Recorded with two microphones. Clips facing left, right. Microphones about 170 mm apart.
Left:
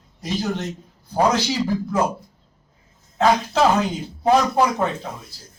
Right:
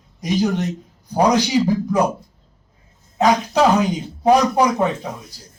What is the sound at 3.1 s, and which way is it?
Speech, 15° right (ahead or behind).